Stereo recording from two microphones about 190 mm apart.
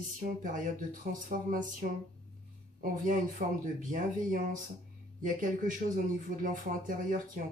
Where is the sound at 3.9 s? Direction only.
45° right (ahead or behind).